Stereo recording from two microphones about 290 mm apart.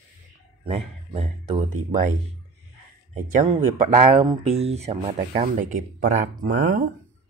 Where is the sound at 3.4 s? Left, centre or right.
Right.